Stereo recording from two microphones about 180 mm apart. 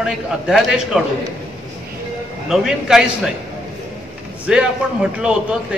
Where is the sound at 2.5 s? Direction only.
5° right (ahead or behind).